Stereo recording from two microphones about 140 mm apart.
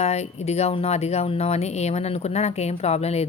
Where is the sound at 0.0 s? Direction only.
50° left (ahead or behind).